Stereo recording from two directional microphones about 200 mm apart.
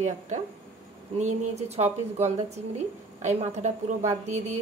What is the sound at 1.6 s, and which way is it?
Speech, 30° right (ahead or behind).